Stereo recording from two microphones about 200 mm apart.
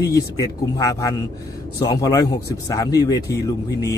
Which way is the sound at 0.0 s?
15° left (ahead or behind).